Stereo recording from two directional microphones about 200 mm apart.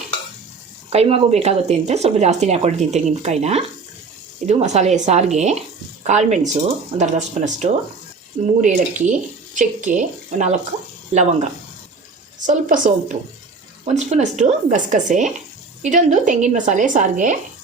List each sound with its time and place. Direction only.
0.9 s speech: 30° right (ahead or behind)